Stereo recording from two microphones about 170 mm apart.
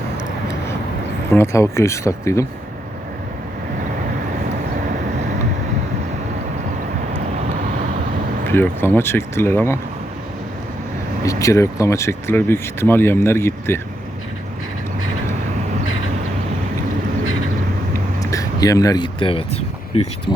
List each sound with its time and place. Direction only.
1.3 s speech: 15° left (ahead or behind)
8.4 s speech: 15° left (ahead or behind)
11.2 s speech: 20° left (ahead or behind)
18.2 s speech: 20° left (ahead or behind); by 19.6 s 35° left (ahead or behind)